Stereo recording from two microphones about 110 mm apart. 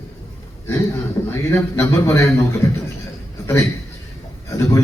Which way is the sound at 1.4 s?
25° left (ahead or behind).